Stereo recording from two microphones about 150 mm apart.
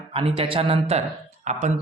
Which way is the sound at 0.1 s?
35° right (ahead or behind).